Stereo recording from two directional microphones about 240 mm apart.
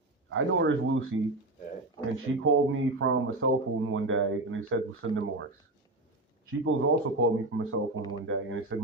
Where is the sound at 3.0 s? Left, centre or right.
Right.